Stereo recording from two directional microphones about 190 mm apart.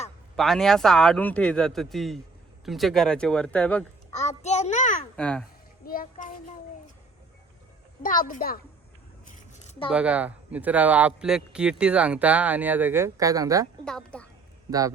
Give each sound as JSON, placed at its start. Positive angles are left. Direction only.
{"t": 0.3, "sound": "a man's voice", "side_deg": 0}
{"t": 4.1, "sound": "a child's voice", "side_deg": 35}
{"t": 5.1, "sound": "a man's voice", "side_deg": 5}
{"t": 5.8, "sound": "a child's voice", "side_deg": 50}
{"t": 8.0, "sound": "a child's voice", "side_deg": 45}
{"t": 9.2, "sound": "a sound", "side_deg": 40}
{"t": 9.9, "sound": "a man's voice", "side_deg": -5}
{"t": 13.8, "sound": "a man's voice", "side_deg": 5}
{"t": 14.7, "sound": "a man's voice", "side_deg": -20}